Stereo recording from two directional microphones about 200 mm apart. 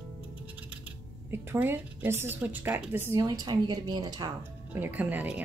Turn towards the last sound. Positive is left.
turn(degrees=-10)  # may be behind; listen again after turning